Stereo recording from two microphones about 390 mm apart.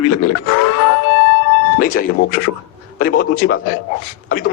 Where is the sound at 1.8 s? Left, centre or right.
Left.